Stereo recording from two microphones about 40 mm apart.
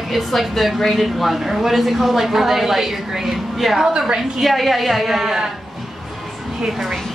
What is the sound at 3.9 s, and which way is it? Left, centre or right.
Speech, right.